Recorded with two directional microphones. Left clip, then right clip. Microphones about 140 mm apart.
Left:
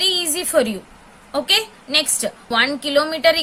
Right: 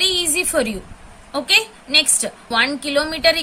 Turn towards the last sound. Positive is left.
turn(degrees=15)  # may be behind; listen again after turning